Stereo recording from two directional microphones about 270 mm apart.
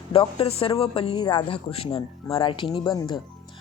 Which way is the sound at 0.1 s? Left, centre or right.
Centre.